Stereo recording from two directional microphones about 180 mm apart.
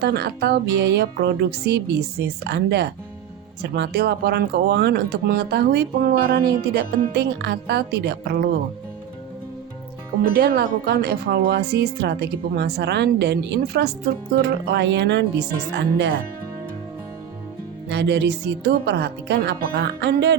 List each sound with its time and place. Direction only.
0.0 s speech: 65° right (ahead or behind)
10.3 s speech: 60° right (ahead or behind)
17.8 s a woman's voice: 70° right (ahead or behind)